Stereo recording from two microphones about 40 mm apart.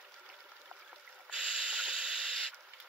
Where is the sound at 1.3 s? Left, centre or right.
Right.